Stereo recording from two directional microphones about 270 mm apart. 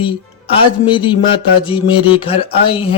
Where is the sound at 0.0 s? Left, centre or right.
Centre.